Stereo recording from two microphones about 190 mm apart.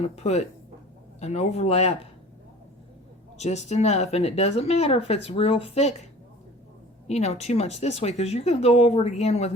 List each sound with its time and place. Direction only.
0.0 s speech: 35° left (ahead or behind)
3.3 s speech: 35° left (ahead or behind)
7.1 s speech: 35° left (ahead or behind)